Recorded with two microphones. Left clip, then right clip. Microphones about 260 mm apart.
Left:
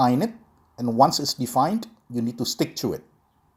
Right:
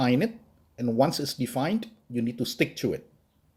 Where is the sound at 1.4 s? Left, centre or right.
Left.